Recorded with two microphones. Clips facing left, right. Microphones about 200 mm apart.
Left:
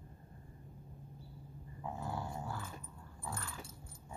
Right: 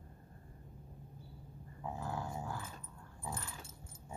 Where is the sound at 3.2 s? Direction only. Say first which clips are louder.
Even; 20° right (ahead or behind).